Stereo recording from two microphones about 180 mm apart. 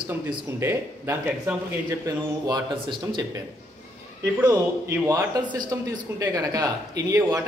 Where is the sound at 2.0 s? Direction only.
20° right (ahead or behind).